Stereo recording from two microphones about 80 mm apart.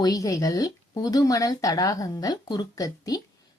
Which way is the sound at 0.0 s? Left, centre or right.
Left.